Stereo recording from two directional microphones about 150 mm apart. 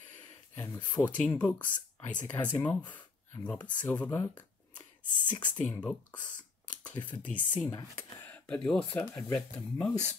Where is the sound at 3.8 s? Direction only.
10° left (ahead or behind).